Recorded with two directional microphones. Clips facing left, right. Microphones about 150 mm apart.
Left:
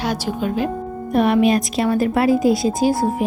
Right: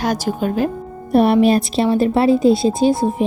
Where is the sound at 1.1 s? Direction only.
35° right (ahead or behind).